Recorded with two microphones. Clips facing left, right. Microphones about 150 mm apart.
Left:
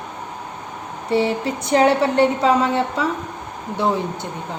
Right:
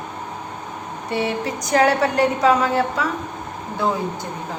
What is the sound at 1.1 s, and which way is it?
A woman's voice, 30° left (ahead or behind).